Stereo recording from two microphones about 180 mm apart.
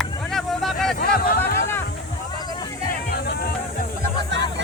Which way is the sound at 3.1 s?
60° left (ahead or behind).